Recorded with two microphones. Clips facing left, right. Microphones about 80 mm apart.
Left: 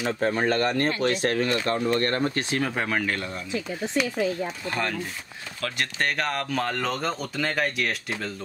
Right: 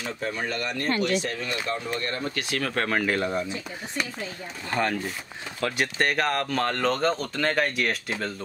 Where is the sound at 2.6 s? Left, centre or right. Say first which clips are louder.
Right 1 dB; centre.